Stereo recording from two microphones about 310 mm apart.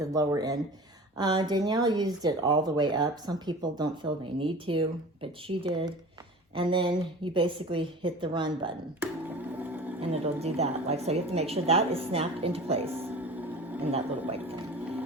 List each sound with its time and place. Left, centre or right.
0.0 s speech: centre
10.0 s a woman's voice: centre
13.0 s music: centre
14.4 s a sound: centre